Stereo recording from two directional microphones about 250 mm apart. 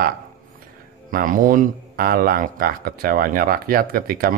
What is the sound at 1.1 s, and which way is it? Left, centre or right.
Speech, right.